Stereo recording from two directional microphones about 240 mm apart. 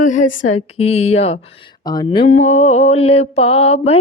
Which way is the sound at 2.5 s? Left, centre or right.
Left.